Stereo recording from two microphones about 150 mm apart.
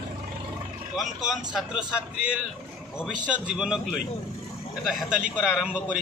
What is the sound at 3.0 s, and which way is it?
A man's voice, 5° right (ahead or behind).